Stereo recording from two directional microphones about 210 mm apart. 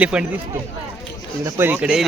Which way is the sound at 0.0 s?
5° right (ahead or behind).